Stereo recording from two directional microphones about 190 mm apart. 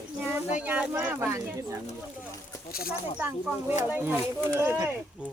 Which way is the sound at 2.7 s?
50° left (ahead or behind).